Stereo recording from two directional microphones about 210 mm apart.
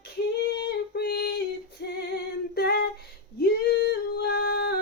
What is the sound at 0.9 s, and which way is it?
Singing, 50° left (ahead or behind).